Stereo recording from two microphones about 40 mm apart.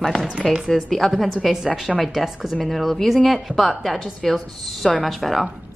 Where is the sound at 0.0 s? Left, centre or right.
Centre.